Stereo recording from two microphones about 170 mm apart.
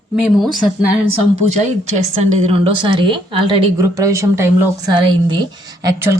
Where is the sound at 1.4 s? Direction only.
45° right (ahead or behind).